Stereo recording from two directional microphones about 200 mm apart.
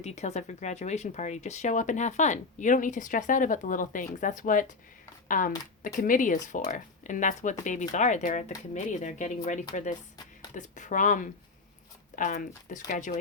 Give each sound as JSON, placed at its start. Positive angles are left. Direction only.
{"t": 0.0, "sound": "speech", "side_deg": 35}